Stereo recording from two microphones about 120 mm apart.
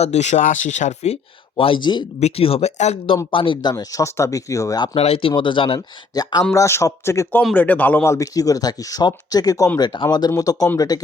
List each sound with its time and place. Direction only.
0.0 s speech: 70° left (ahead or behind); by 2.0 s 40° left (ahead or behind)
2.2 s speech: 55° left (ahead or behind)
3.3 s speech: 45° left (ahead or behind); by 4.9 s 30° left (ahead or behind)
4.9 s speech: 55° left (ahead or behind)
5.3 s speech: 45° left (ahead or behind)
6.1 s speech: 30° left (ahead or behind)